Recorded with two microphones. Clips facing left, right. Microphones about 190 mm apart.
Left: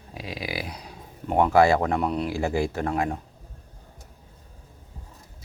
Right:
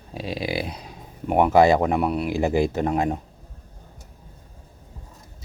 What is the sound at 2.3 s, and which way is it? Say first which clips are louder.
Speech: right 4 dB; 20° right (ahead or behind).